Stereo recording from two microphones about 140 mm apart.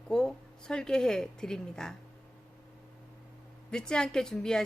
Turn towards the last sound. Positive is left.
turn(degrees=5)  # may be behind; listen again after turning